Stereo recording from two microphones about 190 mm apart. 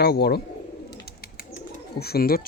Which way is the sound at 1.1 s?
50° left (ahead or behind).